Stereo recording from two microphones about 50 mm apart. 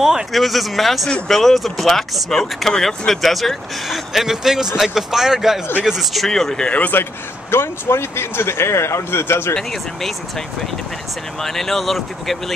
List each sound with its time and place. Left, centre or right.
0.3 s speech: centre
6.2 s speech: centre
6.7 s speech: left
7.5 s speech: left
9.6 s speech: centre
11.4 s speech: centre